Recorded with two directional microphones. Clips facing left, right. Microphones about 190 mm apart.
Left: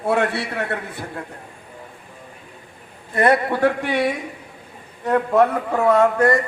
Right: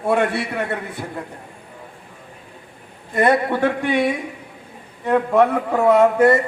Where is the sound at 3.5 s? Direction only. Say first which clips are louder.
Even; centre (ahead or behind).